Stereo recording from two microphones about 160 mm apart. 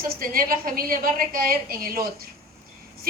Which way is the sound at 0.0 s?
65° right (ahead or behind).